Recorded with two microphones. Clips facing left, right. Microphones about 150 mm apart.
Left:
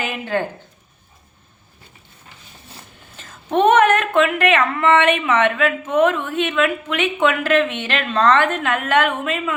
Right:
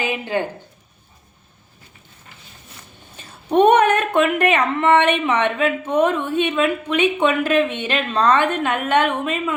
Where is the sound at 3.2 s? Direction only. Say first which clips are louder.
Right 2 dB; 15° right (ahead or behind).